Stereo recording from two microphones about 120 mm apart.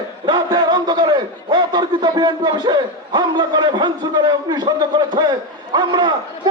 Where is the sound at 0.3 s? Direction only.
35° right (ahead or behind).